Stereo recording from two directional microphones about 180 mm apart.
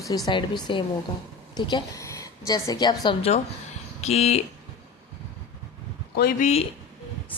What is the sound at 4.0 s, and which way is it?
Speech, 35° left (ahead or behind).